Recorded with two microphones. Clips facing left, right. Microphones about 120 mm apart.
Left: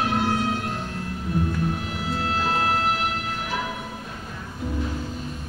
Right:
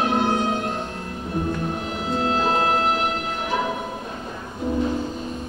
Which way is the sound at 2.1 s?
25° right (ahead or behind).